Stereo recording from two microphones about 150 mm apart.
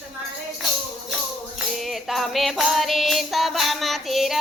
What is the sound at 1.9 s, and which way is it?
Music, centre (ahead or behind).